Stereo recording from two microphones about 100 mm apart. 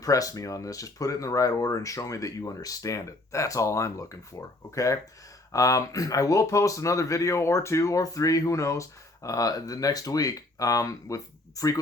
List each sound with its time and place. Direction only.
0.0 s speech: 35° left (ahead or behind)